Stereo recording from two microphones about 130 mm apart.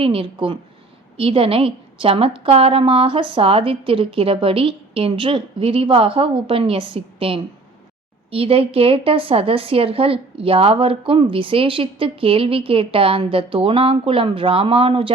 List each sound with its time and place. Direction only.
0.0 s a woman's voice: 45° right (ahead or behind)